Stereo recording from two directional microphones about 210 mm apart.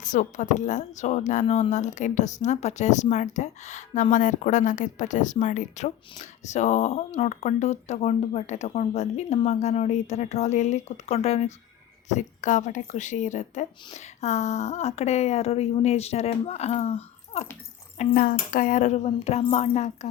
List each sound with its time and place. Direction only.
0.0 s speech: 35° left (ahead or behind)